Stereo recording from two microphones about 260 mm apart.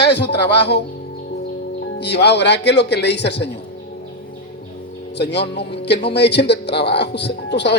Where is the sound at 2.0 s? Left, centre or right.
Left.